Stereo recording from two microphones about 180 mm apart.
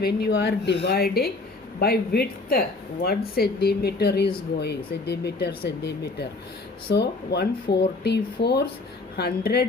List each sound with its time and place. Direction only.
0.0 s speech: 65° left (ahead or behind)